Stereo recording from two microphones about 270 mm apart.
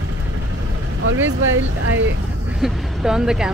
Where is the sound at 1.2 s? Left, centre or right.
Right.